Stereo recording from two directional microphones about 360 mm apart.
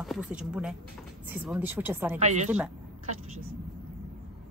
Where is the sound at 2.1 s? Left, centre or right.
Centre.